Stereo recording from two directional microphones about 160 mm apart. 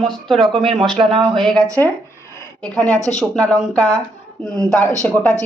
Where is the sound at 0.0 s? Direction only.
Centre (ahead or behind).